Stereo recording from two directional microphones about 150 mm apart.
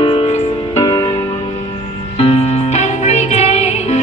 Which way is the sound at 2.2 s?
45° left (ahead or behind).